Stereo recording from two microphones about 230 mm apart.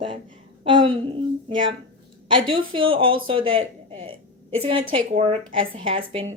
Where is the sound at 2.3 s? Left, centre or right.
Right.